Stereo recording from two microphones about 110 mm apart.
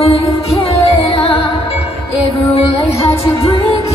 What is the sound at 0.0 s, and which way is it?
Music, 65° left (ahead or behind).